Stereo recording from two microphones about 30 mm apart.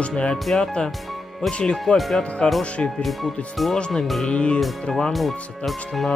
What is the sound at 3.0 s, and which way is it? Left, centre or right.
Speech, centre.